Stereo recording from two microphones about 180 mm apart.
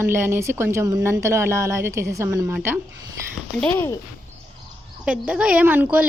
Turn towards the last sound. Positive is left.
turn(degrees=-10)  # may be behind; listen again after turning